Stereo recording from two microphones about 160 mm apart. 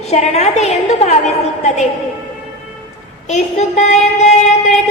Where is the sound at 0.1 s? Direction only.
45° left (ahead or behind).